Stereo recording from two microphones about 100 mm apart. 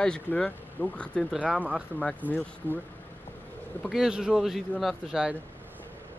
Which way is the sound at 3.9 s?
5° right (ahead or behind).